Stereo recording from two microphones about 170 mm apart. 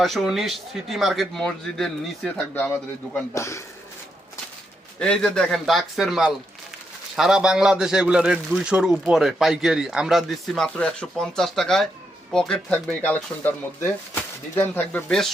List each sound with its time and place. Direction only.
0.0 s a man's voice: centre (ahead or behind); by 3.6 s 15° left (ahead or behind)
4.9 s a man's voice: 5° left (ahead or behind)